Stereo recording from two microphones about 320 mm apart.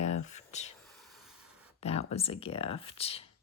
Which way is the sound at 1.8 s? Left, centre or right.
Centre.